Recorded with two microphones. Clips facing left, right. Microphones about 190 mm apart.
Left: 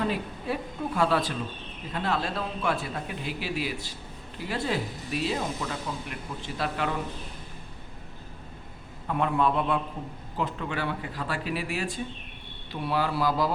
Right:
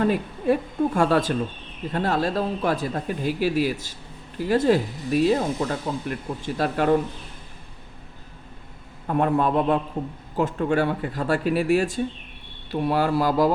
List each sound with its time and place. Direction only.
0.0 s speech: 50° right (ahead or behind)
9.0 s speech: 45° right (ahead or behind)